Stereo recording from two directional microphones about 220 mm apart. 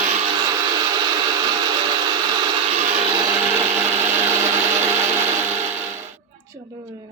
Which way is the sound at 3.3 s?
10° right (ahead or behind).